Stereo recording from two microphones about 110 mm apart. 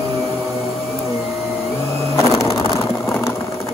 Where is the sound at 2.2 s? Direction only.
30° left (ahead or behind).